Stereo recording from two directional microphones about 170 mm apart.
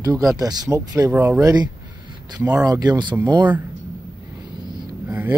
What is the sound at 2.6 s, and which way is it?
Speech, 20° right (ahead or behind).